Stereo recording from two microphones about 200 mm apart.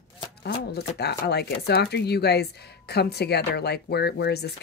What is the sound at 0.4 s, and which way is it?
Speech, 55° left (ahead or behind).